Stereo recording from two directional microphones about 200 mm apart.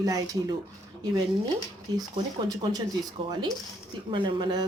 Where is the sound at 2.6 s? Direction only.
25° right (ahead or behind).